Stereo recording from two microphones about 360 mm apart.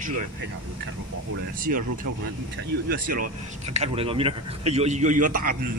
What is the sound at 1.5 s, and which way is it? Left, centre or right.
Speech, right.